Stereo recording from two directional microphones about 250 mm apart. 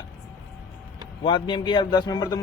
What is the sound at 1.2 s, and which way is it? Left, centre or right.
Speech, centre.